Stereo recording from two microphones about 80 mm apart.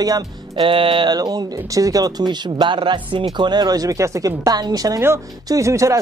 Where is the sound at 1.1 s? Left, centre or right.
Right.